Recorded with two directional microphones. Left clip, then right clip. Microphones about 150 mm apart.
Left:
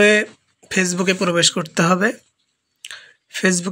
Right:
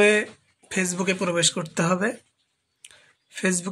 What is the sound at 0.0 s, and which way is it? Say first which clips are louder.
Speech: left 5 dB; 25° left (ahead or behind).